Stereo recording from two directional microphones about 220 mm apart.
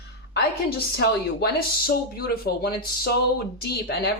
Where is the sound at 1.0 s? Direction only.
45° left (ahead or behind).